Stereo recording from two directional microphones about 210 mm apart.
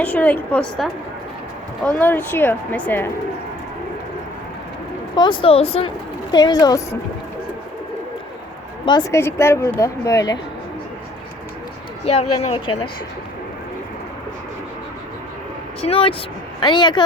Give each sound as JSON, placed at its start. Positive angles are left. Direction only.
{"t": 0.0, "sound": "a woman's voice", "side_deg": 10}
{"t": 2.0, "sound": "a woman's voice", "side_deg": 10}
{"t": 5.1, "sound": "speech", "side_deg": 20}
{"t": 8.8, "sound": "a woman's voice", "side_deg": 20}
{"t": 12.0, "sound": "speech", "side_deg": 30}
{"t": 15.8, "sound": "speech", "side_deg": 25}